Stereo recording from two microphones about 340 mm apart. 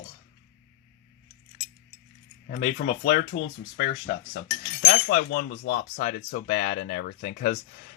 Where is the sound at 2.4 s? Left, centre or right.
Left.